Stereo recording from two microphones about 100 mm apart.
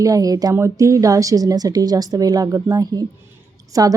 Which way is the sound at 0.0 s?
35° right (ahead or behind).